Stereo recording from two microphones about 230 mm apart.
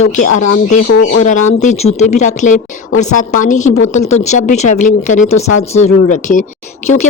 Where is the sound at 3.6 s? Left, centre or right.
Left.